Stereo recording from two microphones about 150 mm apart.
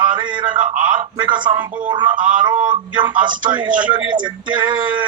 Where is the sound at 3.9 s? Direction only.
30° right (ahead or behind).